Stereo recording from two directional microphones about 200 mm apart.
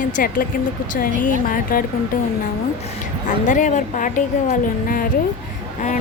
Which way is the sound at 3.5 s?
40° left (ahead or behind).